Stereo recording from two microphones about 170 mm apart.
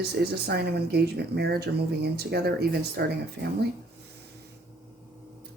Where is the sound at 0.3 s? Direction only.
70° right (ahead or behind).